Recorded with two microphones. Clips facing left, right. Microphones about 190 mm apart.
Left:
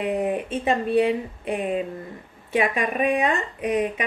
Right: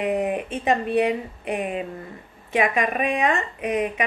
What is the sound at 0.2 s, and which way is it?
Speech, 30° left (ahead or behind).